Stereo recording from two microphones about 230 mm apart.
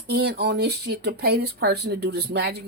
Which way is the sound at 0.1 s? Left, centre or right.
Right.